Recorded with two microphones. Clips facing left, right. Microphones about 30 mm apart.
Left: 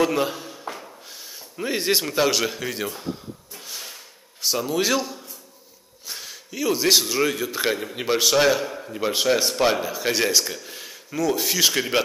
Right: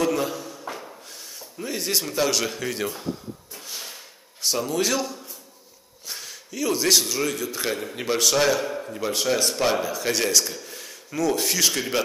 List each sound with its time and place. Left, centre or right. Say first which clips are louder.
0.0 s a sound: left 2 dB; left
1.6 s a man's voice: left 4 dB; left
2.4 s a man's voice: left 1 dB; centre
3.5 s a sound: left 1 dB; centre
6.0 s a man's voice: left 1 dB; centre
11.1 s a man's voice: even; centre
11.6 s a man's voice: left 6 dB; centre